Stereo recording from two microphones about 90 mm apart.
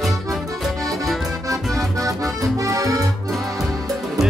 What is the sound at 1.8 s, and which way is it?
Accordion, 40° right (ahead or behind).